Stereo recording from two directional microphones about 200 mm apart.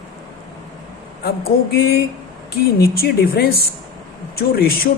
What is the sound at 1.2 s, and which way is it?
Speech, 50° left (ahead or behind).